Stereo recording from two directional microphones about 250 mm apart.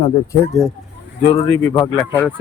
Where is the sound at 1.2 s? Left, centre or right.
Left.